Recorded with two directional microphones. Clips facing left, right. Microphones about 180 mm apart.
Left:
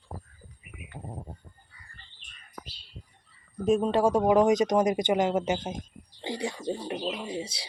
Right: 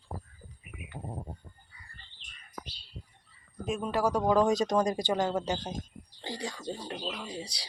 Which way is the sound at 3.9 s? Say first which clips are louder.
Left 1 dB; 25° left (ahead or behind).